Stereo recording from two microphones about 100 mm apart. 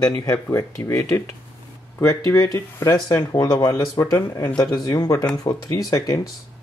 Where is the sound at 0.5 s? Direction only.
30° left (ahead or behind).